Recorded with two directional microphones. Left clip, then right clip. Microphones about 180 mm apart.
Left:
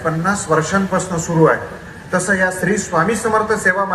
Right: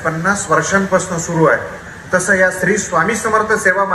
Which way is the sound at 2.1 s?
20° right (ahead or behind).